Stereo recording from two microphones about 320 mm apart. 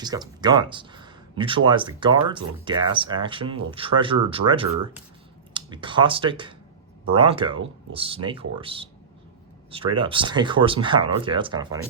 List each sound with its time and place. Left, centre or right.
0.0 s speech: centre